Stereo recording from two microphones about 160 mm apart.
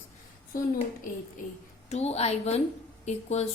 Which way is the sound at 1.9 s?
40° left (ahead or behind).